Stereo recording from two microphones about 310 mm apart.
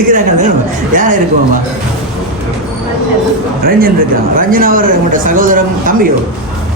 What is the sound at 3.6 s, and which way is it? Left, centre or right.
Speech, right.